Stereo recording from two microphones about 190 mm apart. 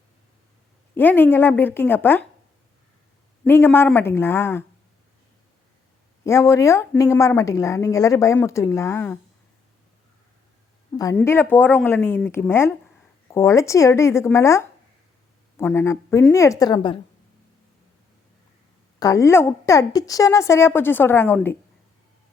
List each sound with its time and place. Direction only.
0.9 s a woman's voice: 10° left (ahead or behind)
3.4 s a woman's voice: 10° left (ahead or behind)
6.2 s a woman's voice: 15° left (ahead or behind)
10.9 s a woman's voice: 15° left (ahead or behind)
18.9 s a woman's voice: 15° left (ahead or behind)